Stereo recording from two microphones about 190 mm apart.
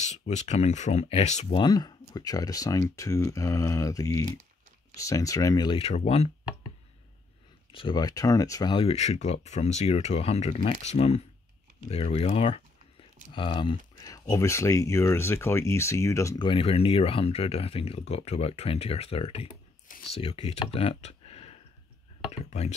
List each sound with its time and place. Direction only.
0.0 s speech: 35° left (ahead or behind)
1.6 s speech: 20° left (ahead or behind)
7.7 s speech: 25° left (ahead or behind)
16.4 s speech: 30° left (ahead or behind)
20.7 s a sound: 30° left (ahead or behind)
22.4 s speech: 35° left (ahead or behind)